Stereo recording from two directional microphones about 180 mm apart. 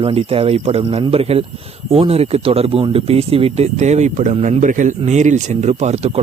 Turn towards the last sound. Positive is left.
turn(degrees=-35)  # may be behind; listen again after turning